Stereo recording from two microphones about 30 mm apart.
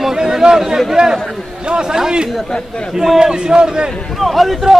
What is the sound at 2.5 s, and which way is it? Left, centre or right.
Speech, left.